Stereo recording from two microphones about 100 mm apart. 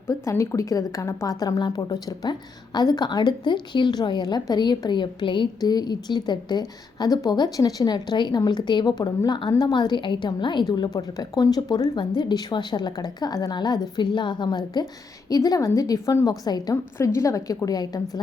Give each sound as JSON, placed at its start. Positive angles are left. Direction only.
{"t": 0.1, "sound": "a woman's voice", "side_deg": 30}
{"t": 17.0, "sound": "a woman's voice", "side_deg": 30}